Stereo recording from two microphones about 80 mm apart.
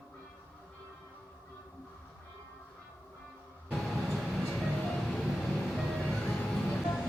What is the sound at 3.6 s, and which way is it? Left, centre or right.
Train, centre.